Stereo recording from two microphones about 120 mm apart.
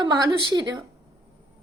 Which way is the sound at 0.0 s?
35° right (ahead or behind).